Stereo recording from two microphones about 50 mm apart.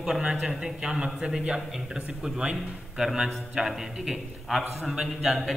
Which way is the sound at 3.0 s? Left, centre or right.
Centre.